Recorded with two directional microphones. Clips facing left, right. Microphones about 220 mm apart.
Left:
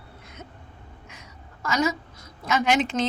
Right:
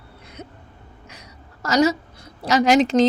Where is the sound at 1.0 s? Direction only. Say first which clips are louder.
Right 2 dB; 40° right (ahead or behind).